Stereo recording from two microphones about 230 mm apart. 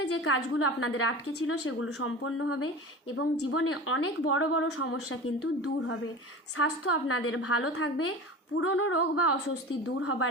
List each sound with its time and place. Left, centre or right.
0.1 s a woman's voice: left